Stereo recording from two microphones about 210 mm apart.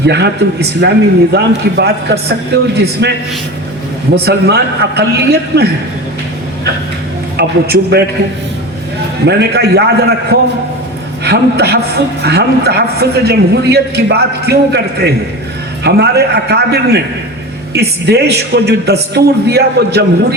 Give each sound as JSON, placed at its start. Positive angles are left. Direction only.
{"t": 0.0, "sound": "a man's voice", "side_deg": -55}
{"t": 7.3, "sound": "a man's voice", "side_deg": -50}
{"t": 9.2, "sound": "a man's voice", "side_deg": -50}
{"t": 11.2, "sound": "a man's voice", "side_deg": -50}